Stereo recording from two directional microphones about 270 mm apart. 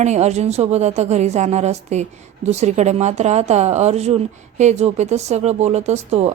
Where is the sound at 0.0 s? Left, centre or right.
Right.